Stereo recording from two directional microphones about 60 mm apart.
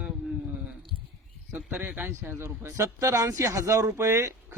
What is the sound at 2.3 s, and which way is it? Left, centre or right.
Speech, right.